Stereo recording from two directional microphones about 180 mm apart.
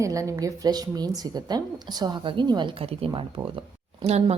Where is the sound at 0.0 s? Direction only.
20° right (ahead or behind).